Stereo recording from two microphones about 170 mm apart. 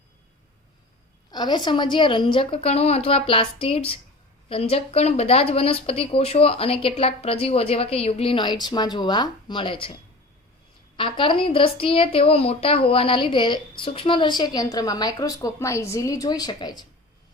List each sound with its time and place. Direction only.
1.3 s speech: 25° left (ahead or behind)
10.9 s a woman's voice: 30° left (ahead or behind)